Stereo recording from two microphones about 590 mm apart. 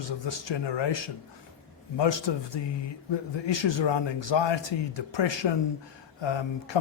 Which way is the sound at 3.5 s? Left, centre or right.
Left.